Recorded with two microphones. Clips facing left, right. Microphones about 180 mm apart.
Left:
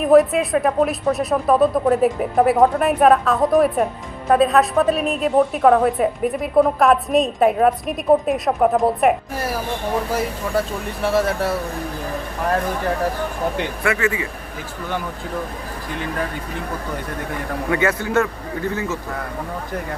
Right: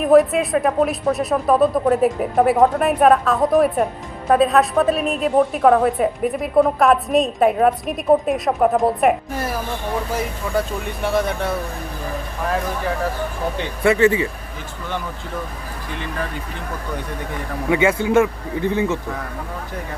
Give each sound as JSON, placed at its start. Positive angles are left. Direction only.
{"t": 0.0, "sound": "a woman's voice", "side_deg": 0}
{"t": 11.0, "sound": "a woman's voice", "side_deg": 5}
{"t": 13.8, "sound": "speech", "side_deg": -30}
{"t": 17.8, "sound": "speech", "side_deg": -15}